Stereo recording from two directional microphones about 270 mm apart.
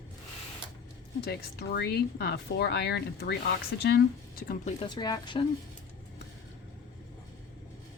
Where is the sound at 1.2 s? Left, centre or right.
Left.